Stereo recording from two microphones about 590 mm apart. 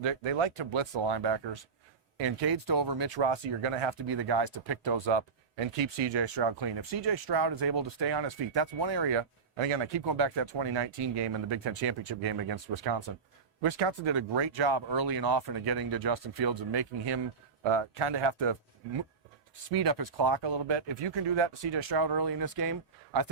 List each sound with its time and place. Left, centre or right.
0.0 s speech: right
17.6 s speech: right
19.7 s speech: right